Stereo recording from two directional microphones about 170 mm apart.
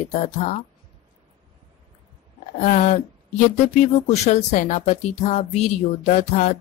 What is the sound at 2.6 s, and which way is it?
Speech, 45° left (ahead or behind).